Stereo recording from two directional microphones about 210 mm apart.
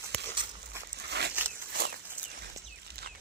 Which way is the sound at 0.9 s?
50° right (ahead or behind).